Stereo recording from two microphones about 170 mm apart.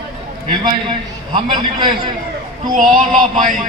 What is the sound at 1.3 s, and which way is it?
Speech, 30° right (ahead or behind).